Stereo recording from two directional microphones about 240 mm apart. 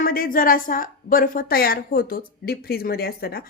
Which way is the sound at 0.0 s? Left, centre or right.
Left.